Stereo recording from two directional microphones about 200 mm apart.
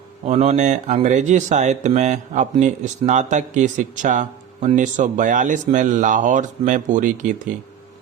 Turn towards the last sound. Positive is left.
turn(degrees=-40)  # may be behind; listen again after turning